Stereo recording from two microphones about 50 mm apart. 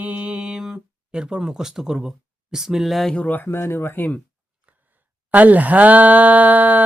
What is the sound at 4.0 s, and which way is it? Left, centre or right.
Speech, left.